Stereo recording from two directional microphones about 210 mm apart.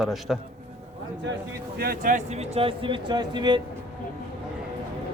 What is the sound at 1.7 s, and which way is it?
Speech, 45° right (ahead or behind).